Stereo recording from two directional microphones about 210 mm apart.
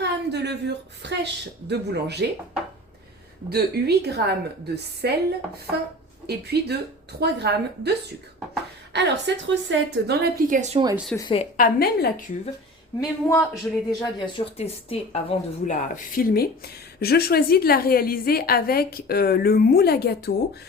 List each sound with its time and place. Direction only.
0.0 s a woman's voice: 55° right (ahead or behind)
3.5 s a woman's voice: 50° right (ahead or behind)
6.2 s a woman's voice: 50° right (ahead or behind); by 10.8 s 35° right (ahead or behind)
10.9 s speech: centre (ahead or behind)
11.2 s speech: 25° left (ahead or behind)
11.5 s a woman's voice: 45° left (ahead or behind)
13.0 s a woman's voice: 15° left (ahead or behind); by 20.6 s 50° left (ahead or behind)